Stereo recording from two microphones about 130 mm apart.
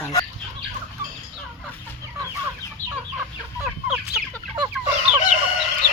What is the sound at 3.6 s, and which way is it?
Fowl, 10° right (ahead or behind).